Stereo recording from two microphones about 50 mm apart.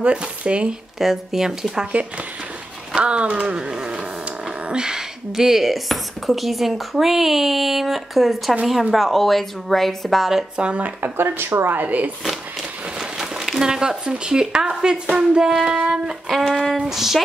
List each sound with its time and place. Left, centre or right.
0.0 s speech: right
0.9 s speech: centre
3.0 s speech: right; by 10.3 s centre
10.6 s speech: right
11.0 s speech: right
11.6 s speech: right
13.2 s speech: centre
16.3 s speech: centre